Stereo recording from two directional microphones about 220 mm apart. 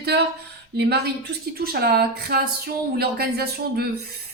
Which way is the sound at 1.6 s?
45° right (ahead or behind).